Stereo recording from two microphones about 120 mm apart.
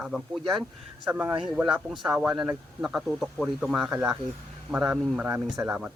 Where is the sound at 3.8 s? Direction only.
15° right (ahead or behind).